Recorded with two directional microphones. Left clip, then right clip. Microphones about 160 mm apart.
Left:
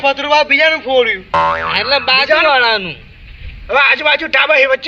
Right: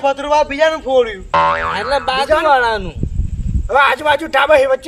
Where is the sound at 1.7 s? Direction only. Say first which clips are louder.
Left 4 dB; 20° right (ahead or behind).